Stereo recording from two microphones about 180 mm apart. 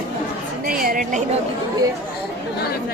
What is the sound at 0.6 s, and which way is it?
Speech, 55° right (ahead or behind).